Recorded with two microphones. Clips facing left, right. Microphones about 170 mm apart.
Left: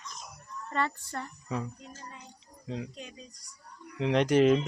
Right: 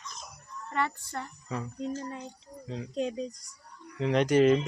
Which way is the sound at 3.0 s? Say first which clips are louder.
Right 15 dB; 85° right.